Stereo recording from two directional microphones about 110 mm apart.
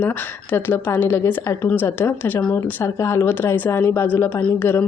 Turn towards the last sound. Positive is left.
turn(degrees=20)  # may be behind; listen again after turning